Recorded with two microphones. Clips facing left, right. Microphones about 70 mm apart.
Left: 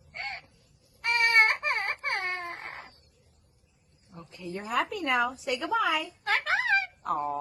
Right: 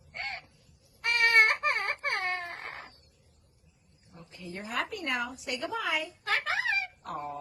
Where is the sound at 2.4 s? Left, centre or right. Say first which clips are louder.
Left 2 dB; centre.